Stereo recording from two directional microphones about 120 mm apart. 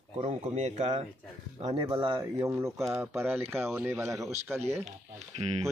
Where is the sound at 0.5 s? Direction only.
75° right (ahead or behind).